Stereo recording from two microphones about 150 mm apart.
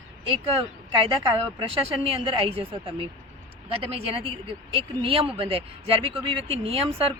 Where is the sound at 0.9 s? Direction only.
35° right (ahead or behind).